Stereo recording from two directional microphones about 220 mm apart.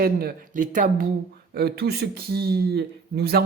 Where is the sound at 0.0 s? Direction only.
40° right (ahead or behind).